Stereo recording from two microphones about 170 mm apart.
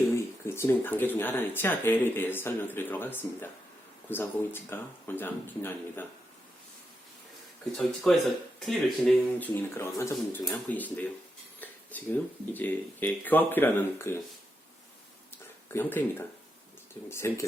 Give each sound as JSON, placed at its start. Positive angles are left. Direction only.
{"t": 0.4, "sound": "speech", "side_deg": 15}
{"t": 7.8, "sound": "speech", "side_deg": 0}
{"t": 15.7, "sound": "speech", "side_deg": 10}